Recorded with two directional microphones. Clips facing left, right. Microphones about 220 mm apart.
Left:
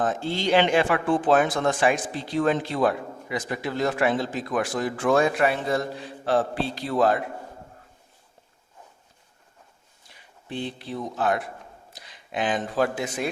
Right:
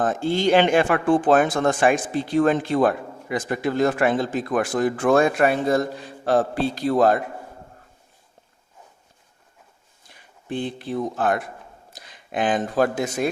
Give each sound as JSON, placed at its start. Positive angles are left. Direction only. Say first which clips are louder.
{"t": 0.0, "sound": "speech", "louder": "right 5 dB", "side_deg": -50}
{"t": 10.5, "sound": "speech", "louder": "right 5 dB", "side_deg": -50}